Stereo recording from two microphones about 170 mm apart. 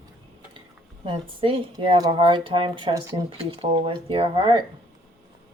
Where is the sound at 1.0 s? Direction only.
30° right (ahead or behind).